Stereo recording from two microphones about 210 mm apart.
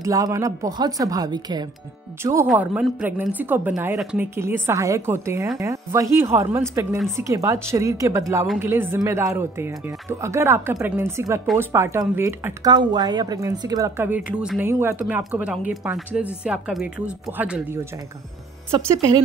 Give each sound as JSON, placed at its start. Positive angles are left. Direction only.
{"t": 0.0, "sound": "speech", "side_deg": -15}
{"t": 2.4, "sound": "speech", "side_deg": -5}